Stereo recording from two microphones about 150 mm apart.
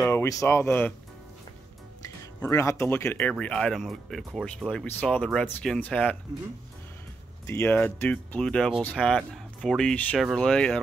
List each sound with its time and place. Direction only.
0.0 s speech: 15° left (ahead or behind)
2.4 s speech: 20° left (ahead or behind)
7.4 s speech: 15° left (ahead or behind)